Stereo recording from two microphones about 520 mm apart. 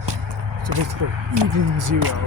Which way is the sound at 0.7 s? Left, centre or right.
Right.